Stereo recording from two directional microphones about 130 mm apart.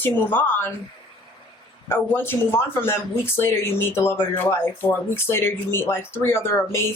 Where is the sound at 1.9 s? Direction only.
15° left (ahead or behind).